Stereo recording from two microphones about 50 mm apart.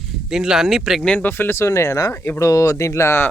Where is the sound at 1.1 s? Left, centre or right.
Left.